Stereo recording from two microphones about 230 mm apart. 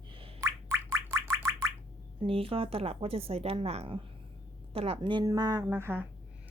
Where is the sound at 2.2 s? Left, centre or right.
Right.